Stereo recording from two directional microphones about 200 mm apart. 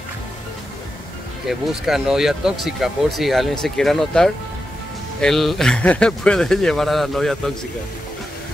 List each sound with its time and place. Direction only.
1.5 s speech: centre (ahead or behind)